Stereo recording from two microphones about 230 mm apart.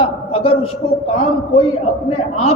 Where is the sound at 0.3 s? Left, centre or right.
Left.